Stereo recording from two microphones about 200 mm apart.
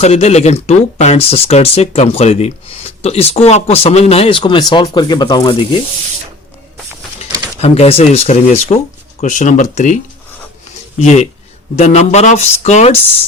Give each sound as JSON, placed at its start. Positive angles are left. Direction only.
{"t": 0.0, "sound": "speech", "side_deg": 30}
{"t": 7.3, "sound": "a sound", "side_deg": -20}
{"t": 7.6, "sound": "speech", "side_deg": 30}